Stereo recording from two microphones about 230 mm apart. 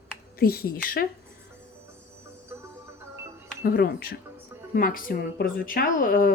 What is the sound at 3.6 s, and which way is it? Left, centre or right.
A woman's voice, left.